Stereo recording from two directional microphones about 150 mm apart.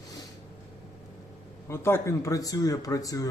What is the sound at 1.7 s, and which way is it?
Speech, 15° left (ahead or behind).